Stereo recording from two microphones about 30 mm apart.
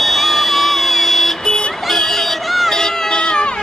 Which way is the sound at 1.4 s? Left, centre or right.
Centre.